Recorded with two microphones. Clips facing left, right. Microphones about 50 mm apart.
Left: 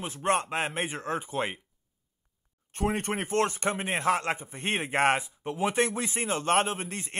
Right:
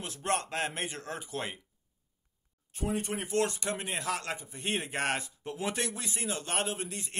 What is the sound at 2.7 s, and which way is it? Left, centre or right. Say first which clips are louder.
A man's voice: left 4 dB; left.